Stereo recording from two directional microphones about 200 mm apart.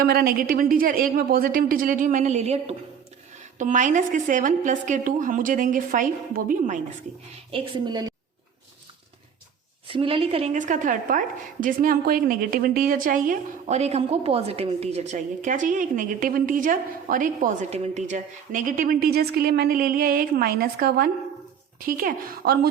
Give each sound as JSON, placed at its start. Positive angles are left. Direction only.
{"t": 0.0, "sound": "a woman's voice", "side_deg": -50}
{"t": 7.5, "sound": "a woman's voice", "side_deg": -25}
{"t": 9.8, "sound": "a woman's voice", "side_deg": -25}